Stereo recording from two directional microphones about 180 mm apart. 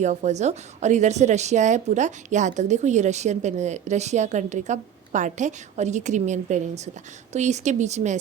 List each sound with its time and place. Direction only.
0.0 s a woman's voice: 40° right (ahead or behind)